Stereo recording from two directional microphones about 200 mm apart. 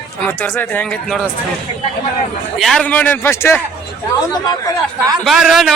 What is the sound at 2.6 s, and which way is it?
Speech, centre (ahead or behind).